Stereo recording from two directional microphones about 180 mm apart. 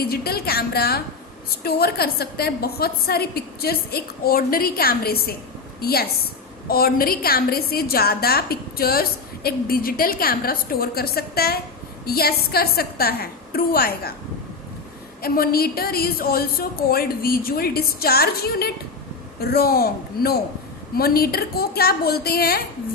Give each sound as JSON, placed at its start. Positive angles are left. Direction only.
{"t": 0.0, "sound": "a woman's voice", "side_deg": 60}
{"t": 15.2, "sound": "a woman's voice", "side_deg": 55}